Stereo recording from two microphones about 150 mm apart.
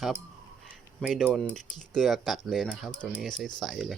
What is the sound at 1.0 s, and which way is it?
Speech, centre (ahead or behind).